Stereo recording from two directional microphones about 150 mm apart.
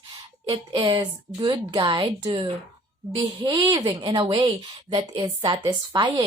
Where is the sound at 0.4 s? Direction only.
35° right (ahead or behind).